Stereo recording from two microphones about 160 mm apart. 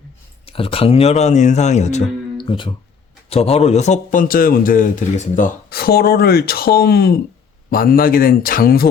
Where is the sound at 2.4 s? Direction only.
30° left (ahead or behind); by 7.1 s 80° left.